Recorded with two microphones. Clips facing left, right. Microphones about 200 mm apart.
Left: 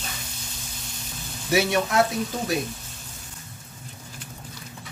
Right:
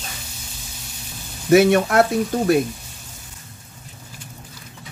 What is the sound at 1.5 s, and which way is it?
Speech, 55° right (ahead or behind).